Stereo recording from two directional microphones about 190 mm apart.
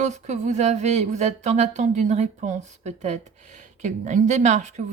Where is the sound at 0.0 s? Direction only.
35° right (ahead or behind).